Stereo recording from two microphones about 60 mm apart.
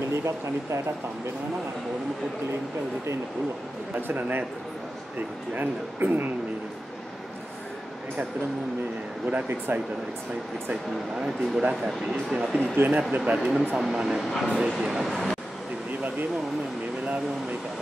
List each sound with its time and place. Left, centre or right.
0.1 s speech: right
3.9 s speech: right
5.5 s speech: right
9.3 s speech: right
10.7 s speech: centre
12.7 s speech: right
13.2 s speech: centre